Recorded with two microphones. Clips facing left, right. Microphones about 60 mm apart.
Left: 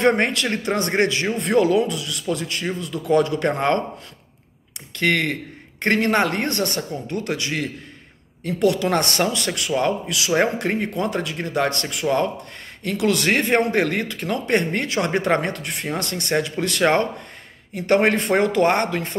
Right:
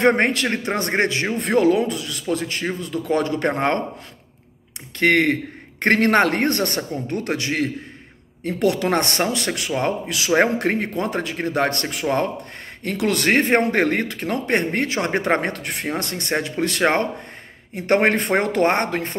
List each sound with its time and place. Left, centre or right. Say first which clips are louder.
0.0 s speech: right 1 dB; right
4.9 s speech: right 4 dB; right